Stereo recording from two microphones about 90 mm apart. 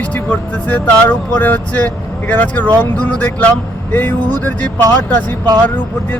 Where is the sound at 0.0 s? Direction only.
20° left (ahead or behind).